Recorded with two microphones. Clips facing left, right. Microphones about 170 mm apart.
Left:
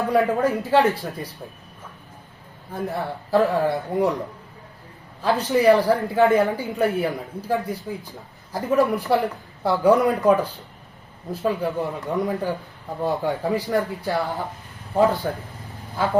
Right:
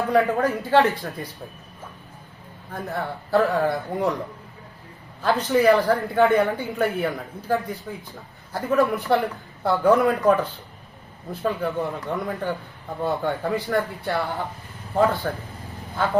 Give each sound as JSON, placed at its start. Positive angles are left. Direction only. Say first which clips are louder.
{"t": 0.1, "sound": "speech", "louder": "even", "side_deg": 10}
{"t": 2.7, "sound": "speech", "louder": "left 2 dB", "side_deg": 10}
{"t": 5.2, "sound": "speech", "louder": "left 1 dB", "side_deg": 10}